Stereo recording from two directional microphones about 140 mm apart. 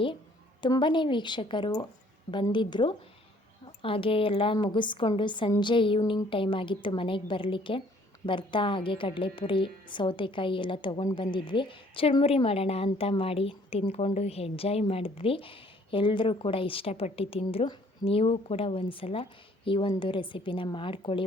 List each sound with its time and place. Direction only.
0.6 s a woman's voice: 35° left (ahead or behind)